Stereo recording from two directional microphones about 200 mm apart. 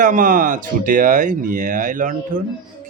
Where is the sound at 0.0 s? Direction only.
40° right (ahead or behind).